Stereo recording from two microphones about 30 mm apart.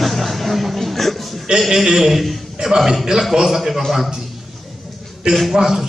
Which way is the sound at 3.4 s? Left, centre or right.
Centre.